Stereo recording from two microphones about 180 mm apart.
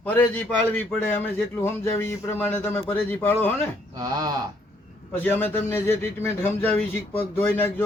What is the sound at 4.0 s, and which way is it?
Speech, 20° right (ahead or behind).